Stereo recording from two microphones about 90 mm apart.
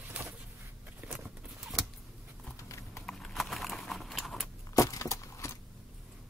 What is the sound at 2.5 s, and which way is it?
Clip-clop, 35° left (ahead or behind).